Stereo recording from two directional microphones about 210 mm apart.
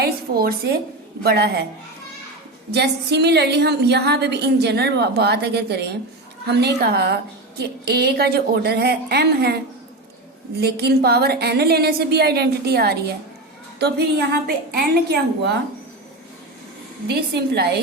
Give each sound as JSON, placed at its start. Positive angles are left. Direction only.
{"t": 0.0, "sound": "a woman's voice", "side_deg": -45}
{"t": 2.7, "sound": "a woman's voice", "side_deg": -50}
{"t": 10.6, "sound": "a woman's voice", "side_deg": -50}
{"t": 17.2, "sound": "a woman's voice", "side_deg": -50}